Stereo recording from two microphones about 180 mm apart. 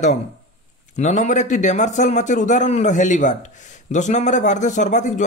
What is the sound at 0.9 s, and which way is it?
A man's voice, 40° left (ahead or behind).